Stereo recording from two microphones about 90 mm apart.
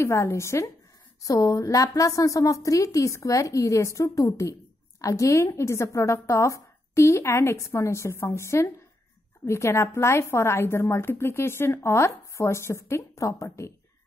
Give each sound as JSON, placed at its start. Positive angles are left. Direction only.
{"t": 0.0, "sound": "a woman's voice", "side_deg": 30}